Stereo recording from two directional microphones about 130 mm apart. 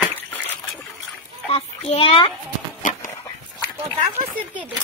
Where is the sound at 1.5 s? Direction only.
45° left (ahead or behind).